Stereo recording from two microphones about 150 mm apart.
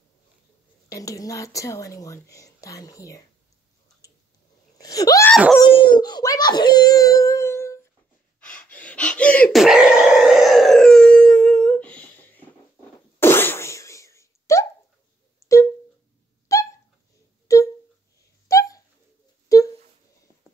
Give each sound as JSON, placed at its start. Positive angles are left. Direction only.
{"t": 0.8, "sound": "speech", "side_deg": 20}
{"t": 4.7, "sound": "speech", "side_deg": 25}
{"t": 5.6, "sound": "a child's voice", "side_deg": 35}
{"t": 8.4, "sound": "gasp", "side_deg": 10}
{"t": 9.6, "sound": "a sound", "side_deg": -5}
{"t": 15.4, "sound": "music", "side_deg": 20}
{"t": 16.5, "sound": "dog", "side_deg": 20}
{"t": 17.5, "sound": "a sound", "side_deg": 20}
{"t": 18.5, "sound": "bird", "side_deg": 25}
{"t": 19.5, "sound": "a sound", "side_deg": 25}